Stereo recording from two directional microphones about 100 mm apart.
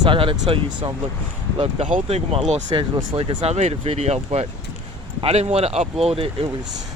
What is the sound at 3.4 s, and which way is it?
Speech, 90° right.